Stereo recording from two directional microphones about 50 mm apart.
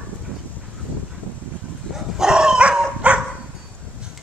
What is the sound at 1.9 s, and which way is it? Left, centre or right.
Dog, centre.